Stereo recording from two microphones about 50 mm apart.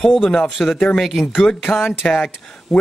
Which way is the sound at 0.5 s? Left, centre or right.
Centre.